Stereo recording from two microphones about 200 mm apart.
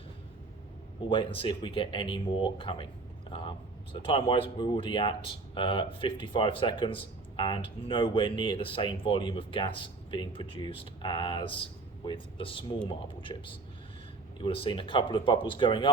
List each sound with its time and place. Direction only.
1.1 s speech: 25° left (ahead or behind)
3.9 s speech: 25° left (ahead or behind)